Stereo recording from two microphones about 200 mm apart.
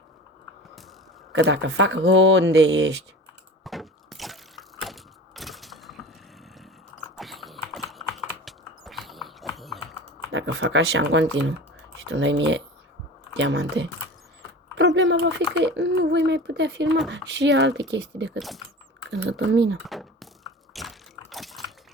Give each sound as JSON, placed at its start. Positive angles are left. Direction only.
{"t": 1.3, "sound": "speech", "side_deg": -60}
{"t": 3.6, "sound": "a sound", "side_deg": 0}
{"t": 7.2, "sound": "dog", "side_deg": 0}
{"t": 8.4, "sound": "a sound", "side_deg": 0}
{"t": 9.6, "sound": "typing", "side_deg": 0}
{"t": 10.3, "sound": "speech", "side_deg": -65}
{"t": 18.3, "sound": "speech", "side_deg": 0}
{"t": 19.2, "sound": "speech", "side_deg": -60}
{"t": 19.8, "sound": "a sound", "side_deg": 0}